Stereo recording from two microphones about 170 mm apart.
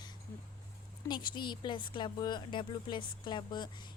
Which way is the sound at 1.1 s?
25° left (ahead or behind).